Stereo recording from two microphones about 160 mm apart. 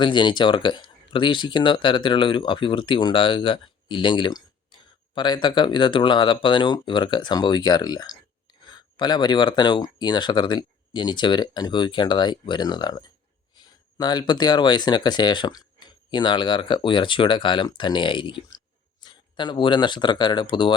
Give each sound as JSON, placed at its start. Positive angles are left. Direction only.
{"t": 0.0, "sound": "speech", "side_deg": 30}